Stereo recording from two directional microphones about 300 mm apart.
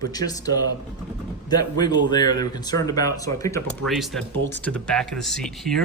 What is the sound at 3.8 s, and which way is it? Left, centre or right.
Speech, centre.